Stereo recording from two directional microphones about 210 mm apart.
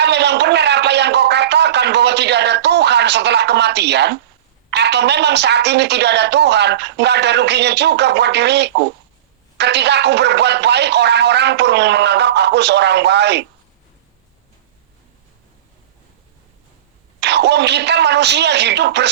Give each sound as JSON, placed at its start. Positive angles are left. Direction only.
{"t": 0.0, "sound": "a sound", "side_deg": -55}
{"t": 4.7, "sound": "speech", "side_deg": -55}
{"t": 17.2, "sound": "speech", "side_deg": -55}